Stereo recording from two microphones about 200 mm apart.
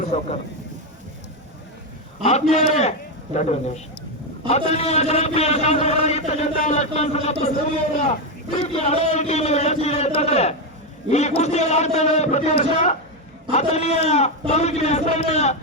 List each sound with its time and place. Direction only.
0.0 s speech: 35° left (ahead or behind)
2.2 s a man's voice: 30° left (ahead or behind)
8.5 s a man's voice: 30° left (ahead or behind)